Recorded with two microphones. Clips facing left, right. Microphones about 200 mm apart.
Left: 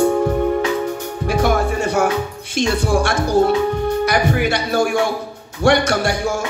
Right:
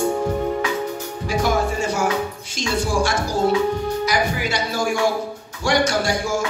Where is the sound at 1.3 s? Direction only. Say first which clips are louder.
Left 3 dB; 60° left (ahead or behind).